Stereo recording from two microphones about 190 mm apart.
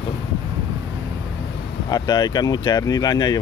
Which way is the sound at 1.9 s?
20° left (ahead or behind).